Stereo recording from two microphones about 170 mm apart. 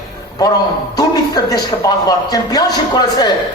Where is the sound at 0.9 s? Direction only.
25° left (ahead or behind).